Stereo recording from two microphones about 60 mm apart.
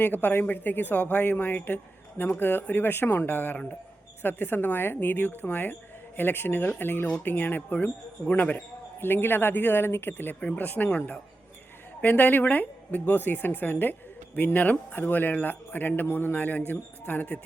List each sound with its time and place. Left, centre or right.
0.0 s a man's voice: left
10.4 s a man's voice: left
10.9 s a man's voice: centre
12.0 s a man's voice: left